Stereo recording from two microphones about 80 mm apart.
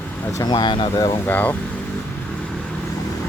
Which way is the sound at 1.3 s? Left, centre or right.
Left.